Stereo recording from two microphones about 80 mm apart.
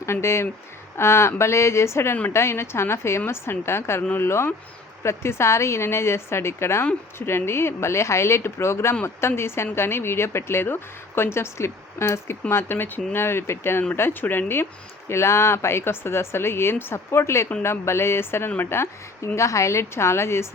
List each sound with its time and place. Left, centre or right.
0.0 s speech: left